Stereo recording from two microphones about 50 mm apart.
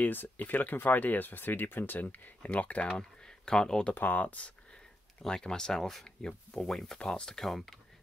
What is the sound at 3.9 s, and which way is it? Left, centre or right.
Speech, left.